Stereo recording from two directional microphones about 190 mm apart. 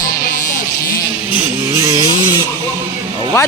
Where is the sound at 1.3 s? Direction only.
15° right (ahead or behind).